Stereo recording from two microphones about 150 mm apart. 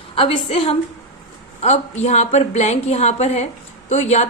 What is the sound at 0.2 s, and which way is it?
A woman's voice, 40° left (ahead or behind).